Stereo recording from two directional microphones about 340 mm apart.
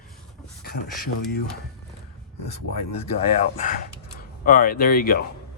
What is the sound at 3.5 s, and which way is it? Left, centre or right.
Speech, left.